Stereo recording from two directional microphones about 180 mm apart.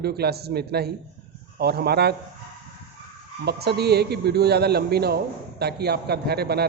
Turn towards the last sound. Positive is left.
turn(degrees=-60)  # may be behind; listen again after turning